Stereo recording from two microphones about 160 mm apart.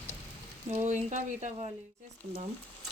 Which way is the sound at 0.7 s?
50° right (ahead or behind).